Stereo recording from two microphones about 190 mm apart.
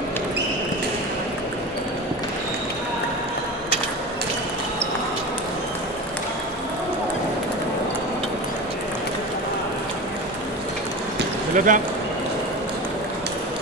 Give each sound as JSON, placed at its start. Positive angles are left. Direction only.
{"t": 11.5, "sound": "speech", "side_deg": -45}